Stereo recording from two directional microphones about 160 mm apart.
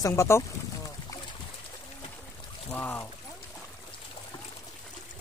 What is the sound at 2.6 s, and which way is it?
Speech, 10° left (ahead or behind).